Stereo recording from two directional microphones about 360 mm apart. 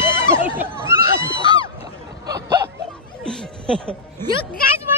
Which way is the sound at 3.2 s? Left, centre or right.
Centre.